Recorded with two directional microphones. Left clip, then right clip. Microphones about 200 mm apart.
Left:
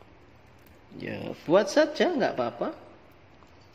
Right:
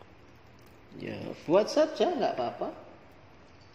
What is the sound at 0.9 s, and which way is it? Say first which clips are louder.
Speech: left 3 dB; 20° left (ahead or behind).